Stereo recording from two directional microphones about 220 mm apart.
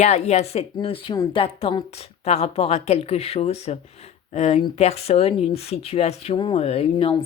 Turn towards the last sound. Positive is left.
turn(degrees=25)  # may be behind; listen again after turning